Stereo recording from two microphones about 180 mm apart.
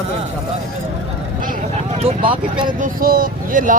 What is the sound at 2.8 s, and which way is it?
Speech, 55° right (ahead or behind).